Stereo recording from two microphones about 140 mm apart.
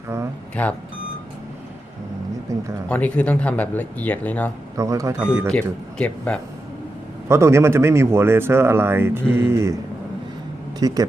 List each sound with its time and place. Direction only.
0.6 s speech: 10° left (ahead or behind)
2.5 s speech: 25° right (ahead or behind)
2.9 s speech: 10° left (ahead or behind)
4.8 s speech: 20° right (ahead or behind)
5.5 s speech: 5° left (ahead or behind)
7.3 s speech: 20° right (ahead or behind)
10.8 s speech: 30° right (ahead or behind)